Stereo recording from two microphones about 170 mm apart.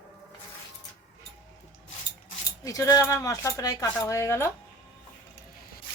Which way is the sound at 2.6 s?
20° left (ahead or behind).